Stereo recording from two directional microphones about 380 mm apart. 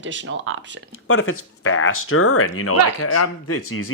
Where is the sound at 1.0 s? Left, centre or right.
Left.